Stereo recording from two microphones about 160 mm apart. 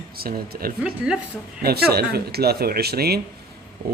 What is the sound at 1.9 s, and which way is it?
Speech, 80° right.